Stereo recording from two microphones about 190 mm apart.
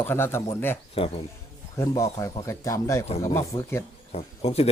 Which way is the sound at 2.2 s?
15° left (ahead or behind).